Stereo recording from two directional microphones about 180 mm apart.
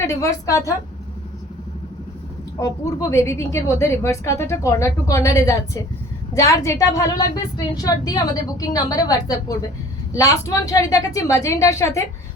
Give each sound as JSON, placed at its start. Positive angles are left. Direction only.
{"t": 0.0, "sound": "a woman's voice", "side_deg": 15}
{"t": 2.6, "sound": "a woman's voice", "side_deg": 20}